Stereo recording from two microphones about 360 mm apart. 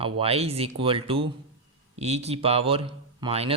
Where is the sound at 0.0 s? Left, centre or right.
Centre.